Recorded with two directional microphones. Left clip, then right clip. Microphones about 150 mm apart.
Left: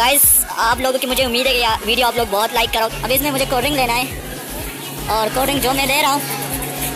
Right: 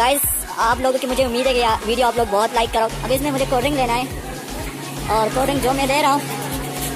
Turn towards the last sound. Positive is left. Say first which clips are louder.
# left 1 dB
turn(degrees=-5)  # may be behind; listen again after turning